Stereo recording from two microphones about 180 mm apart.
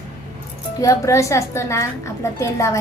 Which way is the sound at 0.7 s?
15° left (ahead or behind).